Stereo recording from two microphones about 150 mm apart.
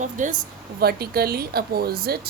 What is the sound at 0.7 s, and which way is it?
Speech, 90° right.